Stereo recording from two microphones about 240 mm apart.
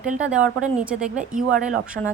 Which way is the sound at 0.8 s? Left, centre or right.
Centre.